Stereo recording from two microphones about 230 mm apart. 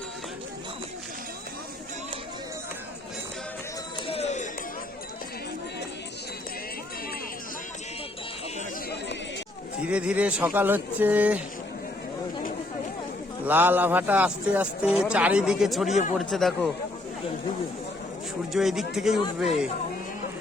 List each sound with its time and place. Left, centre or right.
4.0 s chatter: left
9.8 s a man's voice: centre
13.4 s a man's voice: centre
18.5 s a man's voice: centre